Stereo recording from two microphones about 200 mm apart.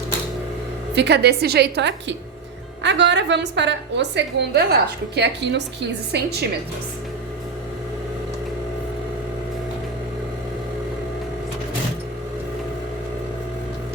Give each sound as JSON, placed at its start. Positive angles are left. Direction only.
{"t": 0.9, "sound": "a woman's voice", "side_deg": -55}